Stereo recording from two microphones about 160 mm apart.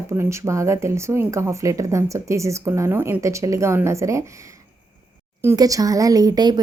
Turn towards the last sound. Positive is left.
turn(degrees=-25)  # may be behind; listen again after turning